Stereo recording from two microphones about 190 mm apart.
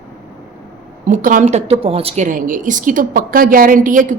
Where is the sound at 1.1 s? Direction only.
45° right (ahead or behind).